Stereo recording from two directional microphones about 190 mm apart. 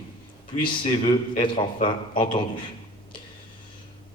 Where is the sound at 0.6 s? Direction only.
30° left (ahead or behind).